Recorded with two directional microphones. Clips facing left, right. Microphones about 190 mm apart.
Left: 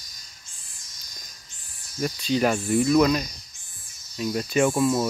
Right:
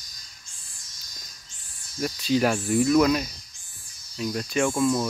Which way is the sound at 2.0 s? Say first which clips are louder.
Even; centre (ahead or behind).